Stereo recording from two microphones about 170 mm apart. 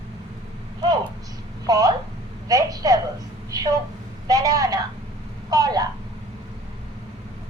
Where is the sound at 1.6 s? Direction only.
20° right (ahead or behind).